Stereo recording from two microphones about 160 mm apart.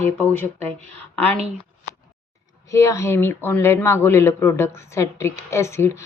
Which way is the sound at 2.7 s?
20° left (ahead or behind).